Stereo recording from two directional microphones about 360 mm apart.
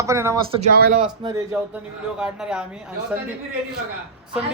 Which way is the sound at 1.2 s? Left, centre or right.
Centre.